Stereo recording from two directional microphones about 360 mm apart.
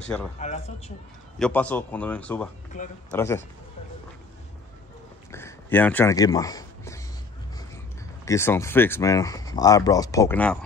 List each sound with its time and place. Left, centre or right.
0.0 s speech: centre
0.4 s speech: centre
1.4 s speech: centre
5.3 s a sound: centre
8.3 s speech: centre